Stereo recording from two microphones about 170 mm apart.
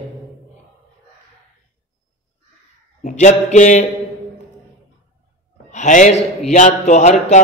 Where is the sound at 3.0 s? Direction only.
45° left (ahead or behind).